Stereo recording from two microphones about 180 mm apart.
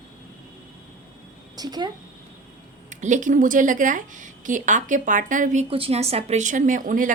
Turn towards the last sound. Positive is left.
turn(degrees=-45)  # may be behind; listen again after turning